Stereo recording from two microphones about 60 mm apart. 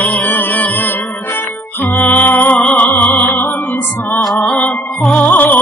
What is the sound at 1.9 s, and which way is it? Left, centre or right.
Music, left.